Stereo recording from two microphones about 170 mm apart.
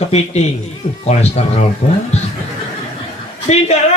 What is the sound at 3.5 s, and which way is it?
Speech, 40° left (ahead or behind).